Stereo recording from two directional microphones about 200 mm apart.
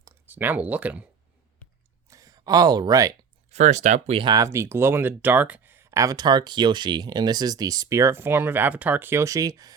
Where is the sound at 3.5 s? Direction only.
35° right (ahead or behind).